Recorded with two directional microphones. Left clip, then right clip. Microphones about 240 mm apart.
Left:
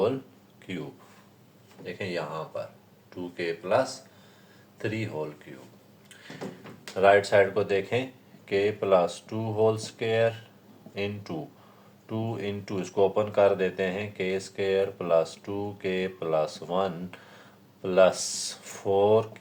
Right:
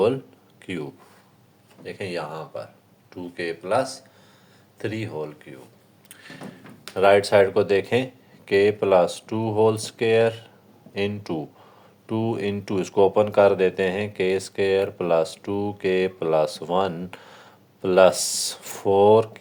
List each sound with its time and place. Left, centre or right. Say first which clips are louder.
0.6 s speech: right 6 dB; right
6.9 s speech: right 3 dB; right